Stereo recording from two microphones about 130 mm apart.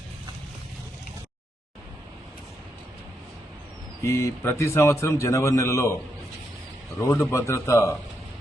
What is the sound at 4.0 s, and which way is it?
A man's voice, 20° left (ahead or behind).